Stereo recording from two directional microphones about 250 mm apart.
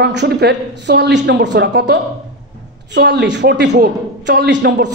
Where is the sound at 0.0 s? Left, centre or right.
Right.